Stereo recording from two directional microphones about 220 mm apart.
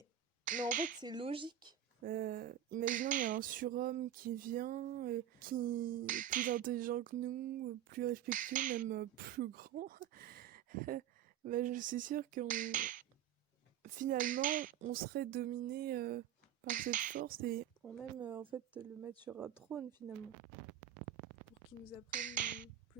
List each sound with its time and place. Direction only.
0.4 s speech: 35° right (ahead or behind)
1.0 s speech: 20° right (ahead or behind)
2.0 s speech: 40° right (ahead or behind)
18.2 s speech: 20° right (ahead or behind)
19.7 s speech: 5° right (ahead or behind)
22.1 s speech: 35° right (ahead or behind)